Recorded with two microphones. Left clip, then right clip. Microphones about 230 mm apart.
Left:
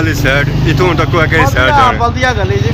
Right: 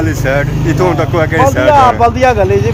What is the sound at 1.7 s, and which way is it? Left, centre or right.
Speech, right.